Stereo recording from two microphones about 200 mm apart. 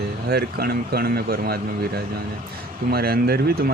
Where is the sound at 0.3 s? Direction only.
55° right (ahead or behind).